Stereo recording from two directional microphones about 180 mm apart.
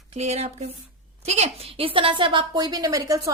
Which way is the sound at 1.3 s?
35° right (ahead or behind).